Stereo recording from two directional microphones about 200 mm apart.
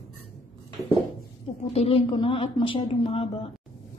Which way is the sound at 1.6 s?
30° left (ahead or behind).